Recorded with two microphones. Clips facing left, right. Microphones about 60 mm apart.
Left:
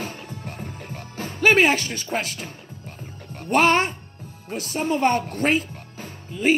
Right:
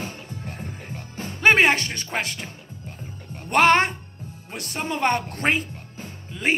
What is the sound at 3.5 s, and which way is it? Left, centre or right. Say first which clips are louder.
A woman's voice: right 1 dB; right.